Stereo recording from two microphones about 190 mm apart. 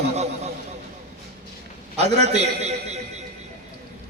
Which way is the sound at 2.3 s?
35° right (ahead or behind).